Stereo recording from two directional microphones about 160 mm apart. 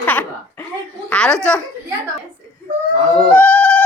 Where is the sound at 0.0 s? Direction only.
10° left (ahead or behind).